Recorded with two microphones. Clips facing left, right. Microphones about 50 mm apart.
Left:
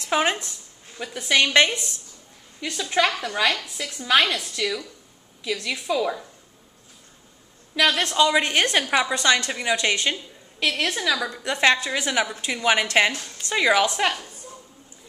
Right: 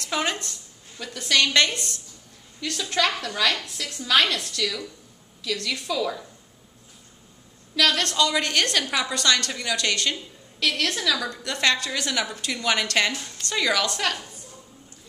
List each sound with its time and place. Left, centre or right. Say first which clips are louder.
0.0 s a woman's voice: left 4 dB; left
7.7 s a woman's voice: left 2 dB; centre